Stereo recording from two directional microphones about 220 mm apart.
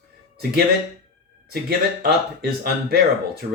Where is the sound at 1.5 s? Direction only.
45° right (ahead or behind).